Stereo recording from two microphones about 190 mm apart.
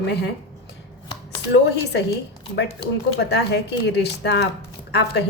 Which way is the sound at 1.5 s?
60° left (ahead or behind).